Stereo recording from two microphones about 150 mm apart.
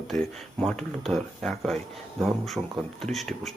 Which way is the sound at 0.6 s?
5° left (ahead or behind).